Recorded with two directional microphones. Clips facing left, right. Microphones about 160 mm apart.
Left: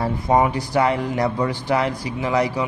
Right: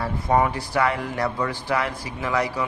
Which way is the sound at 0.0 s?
20° left (ahead or behind).